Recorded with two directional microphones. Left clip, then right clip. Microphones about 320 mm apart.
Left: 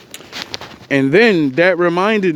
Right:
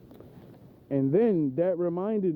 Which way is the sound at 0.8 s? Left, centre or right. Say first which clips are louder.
Left 13 dB; left.